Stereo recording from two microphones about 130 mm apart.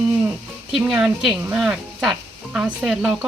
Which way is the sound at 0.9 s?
5° right (ahead or behind).